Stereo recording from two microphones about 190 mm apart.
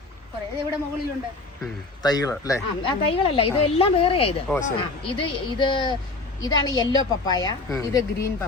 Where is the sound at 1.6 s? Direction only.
20° left (ahead or behind).